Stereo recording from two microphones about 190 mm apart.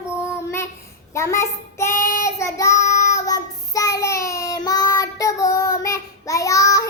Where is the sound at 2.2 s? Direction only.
15° left (ahead or behind).